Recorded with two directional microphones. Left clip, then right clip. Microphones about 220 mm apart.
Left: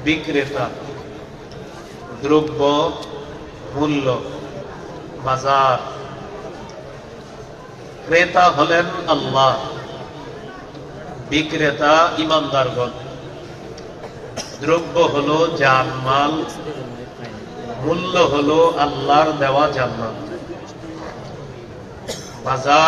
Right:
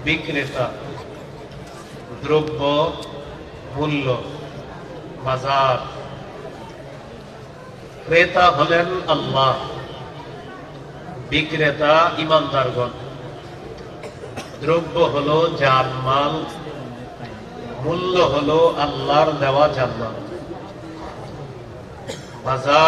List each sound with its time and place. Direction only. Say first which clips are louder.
0.0 s a man's voice: left 2 dB; 45° left (ahead or behind)
2.2 s a man's voice: left 3 dB; 50° left (ahead or behind)
5.2 s a man's voice: left 3 dB; 45° left (ahead or behind)
8.1 s a man's voice: left 1 dB; 50° left (ahead or behind)
11.2 s a man's voice: left 1 dB; 50° left (ahead or behind)
14.3 s a man's voice: left 1 dB; 45° left (ahead or behind)
17.8 s a man's voice: left 1 dB; 45° left (ahead or behind)
22.0 s a sound: left 1 dB; 45° left (ahead or behind)